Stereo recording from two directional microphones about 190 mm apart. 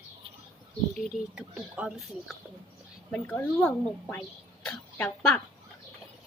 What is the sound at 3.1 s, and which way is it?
Speech, 10° left (ahead or behind).